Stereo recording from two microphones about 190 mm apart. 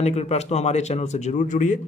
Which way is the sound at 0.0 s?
35° left (ahead or behind).